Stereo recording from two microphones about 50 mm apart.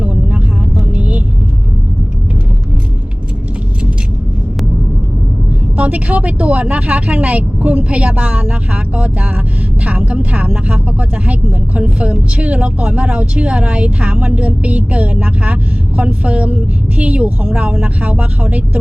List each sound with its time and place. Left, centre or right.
0.0 s vehicle: right
5.7 s speech: right